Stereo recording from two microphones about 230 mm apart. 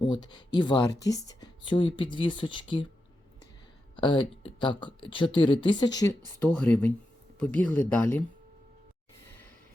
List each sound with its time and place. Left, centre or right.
0.0 s speech: centre
3.9 s speech: left
6.4 s speech: centre